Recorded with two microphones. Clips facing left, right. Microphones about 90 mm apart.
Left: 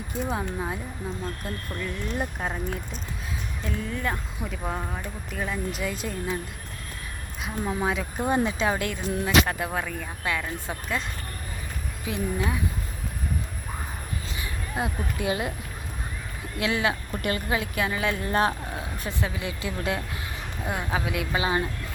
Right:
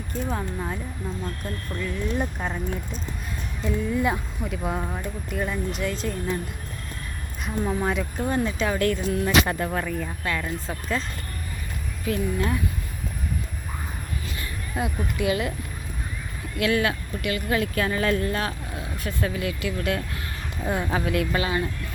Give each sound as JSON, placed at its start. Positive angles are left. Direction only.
{"t": 0.1, "sound": "speech", "side_deg": 5}
{"t": 1.8, "sound": "speech", "side_deg": 5}
{"t": 3.6, "sound": "speech", "side_deg": -5}
{"t": 7.4, "sound": "speech", "side_deg": 0}
{"t": 8.2, "sound": "speech", "side_deg": 20}
{"t": 9.2, "sound": "speech", "side_deg": 10}
{"t": 12.0, "sound": "speech", "side_deg": 15}
{"t": 14.3, "sound": "speech", "side_deg": 25}
{"t": 16.6, "sound": "speech", "side_deg": 20}
{"t": 17.2, "sound": "speech", "side_deg": 40}
{"t": 17.5, "sound": "speech", "side_deg": 15}
{"t": 18.3, "sound": "speech", "side_deg": 30}
{"t": 20.7, "sound": "speech", "side_deg": 5}
{"t": 21.4, "sound": "speech", "side_deg": 25}